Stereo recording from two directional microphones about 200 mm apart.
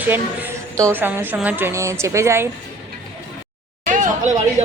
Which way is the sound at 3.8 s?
40° right (ahead or behind).